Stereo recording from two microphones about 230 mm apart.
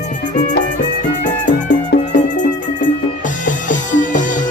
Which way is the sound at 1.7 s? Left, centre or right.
Left.